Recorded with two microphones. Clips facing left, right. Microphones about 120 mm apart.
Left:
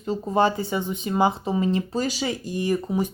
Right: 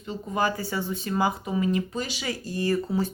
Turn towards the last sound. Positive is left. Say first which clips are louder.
# left 1 dB
turn(degrees=15)  # may be behind; listen again after turning